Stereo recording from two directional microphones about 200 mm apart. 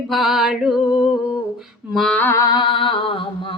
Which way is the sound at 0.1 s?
Centre (ahead or behind).